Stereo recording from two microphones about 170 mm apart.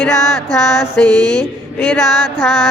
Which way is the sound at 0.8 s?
10° left (ahead or behind).